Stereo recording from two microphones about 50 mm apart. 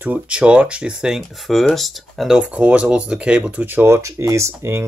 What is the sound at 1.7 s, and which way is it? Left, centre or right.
Speech, centre.